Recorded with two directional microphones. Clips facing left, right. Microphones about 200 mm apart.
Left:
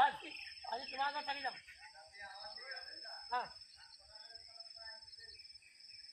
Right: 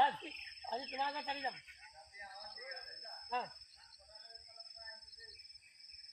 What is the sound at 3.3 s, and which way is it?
Speech, 20° right (ahead or behind).